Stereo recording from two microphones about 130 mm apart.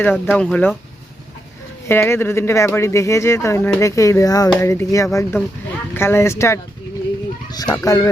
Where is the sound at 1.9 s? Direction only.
20° left (ahead or behind).